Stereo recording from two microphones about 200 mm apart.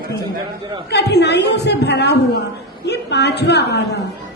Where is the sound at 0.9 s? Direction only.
55° left (ahead or behind).